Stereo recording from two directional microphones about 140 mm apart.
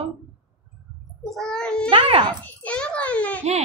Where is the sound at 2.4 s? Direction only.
10° left (ahead or behind).